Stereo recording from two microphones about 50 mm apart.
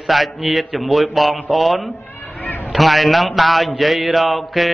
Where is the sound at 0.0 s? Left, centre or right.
Centre.